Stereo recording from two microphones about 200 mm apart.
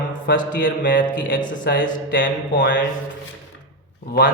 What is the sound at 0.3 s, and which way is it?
Mantra, 55° left (ahead or behind).